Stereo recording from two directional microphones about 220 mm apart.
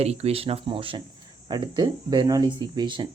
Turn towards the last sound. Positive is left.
turn(degrees=-20)  # may be behind; listen again after turning